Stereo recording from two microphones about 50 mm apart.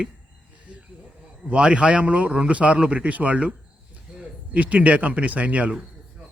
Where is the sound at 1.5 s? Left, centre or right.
Right.